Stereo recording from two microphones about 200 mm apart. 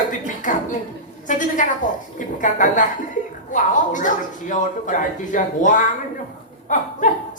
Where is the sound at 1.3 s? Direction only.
40° left (ahead or behind).